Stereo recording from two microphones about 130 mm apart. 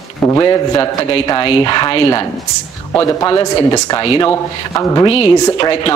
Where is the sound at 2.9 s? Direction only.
25° left (ahead or behind).